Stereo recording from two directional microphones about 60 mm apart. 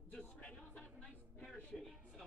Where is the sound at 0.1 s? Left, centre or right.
Left.